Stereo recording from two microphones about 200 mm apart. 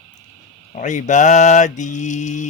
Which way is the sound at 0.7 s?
35° left (ahead or behind).